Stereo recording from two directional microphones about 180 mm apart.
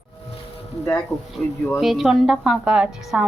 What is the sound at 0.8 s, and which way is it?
A woman's voice, 5° left (ahead or behind).